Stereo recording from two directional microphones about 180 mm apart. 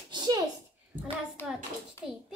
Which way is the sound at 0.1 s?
20° right (ahead or behind).